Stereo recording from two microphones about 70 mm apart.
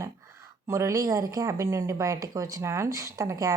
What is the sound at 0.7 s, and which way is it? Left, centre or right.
Speech, right.